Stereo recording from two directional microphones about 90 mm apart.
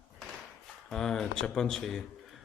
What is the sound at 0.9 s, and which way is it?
A man's voice, 5° left (ahead or behind).